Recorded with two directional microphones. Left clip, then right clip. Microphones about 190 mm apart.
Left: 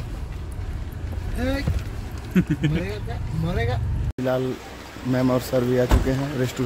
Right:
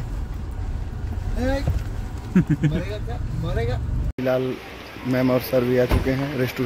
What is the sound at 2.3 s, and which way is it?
Speech, 55° right (ahead or behind).